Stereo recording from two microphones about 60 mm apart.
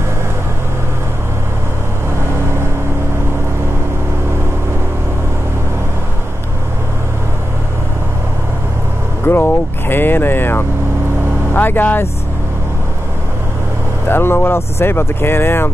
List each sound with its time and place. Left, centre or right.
9.2 s vehicle: left
11.5 s speech: left
14.0 s speech: left